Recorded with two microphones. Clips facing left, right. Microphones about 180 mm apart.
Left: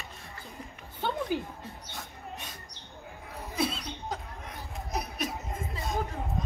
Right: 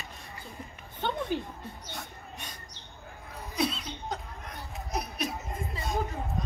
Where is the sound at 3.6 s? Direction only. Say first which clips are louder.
Right 1 dB; 5° left (ahead or behind).